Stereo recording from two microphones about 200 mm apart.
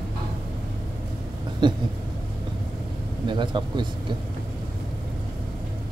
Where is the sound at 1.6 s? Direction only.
20° right (ahead or behind).